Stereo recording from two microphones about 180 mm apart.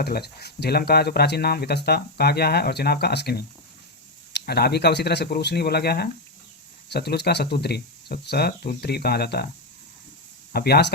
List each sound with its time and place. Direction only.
0.0 s speech: 60° left (ahead or behind)
10.5 s speech: 60° left (ahead or behind)